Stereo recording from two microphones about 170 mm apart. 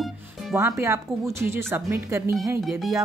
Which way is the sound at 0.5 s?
20° right (ahead or behind).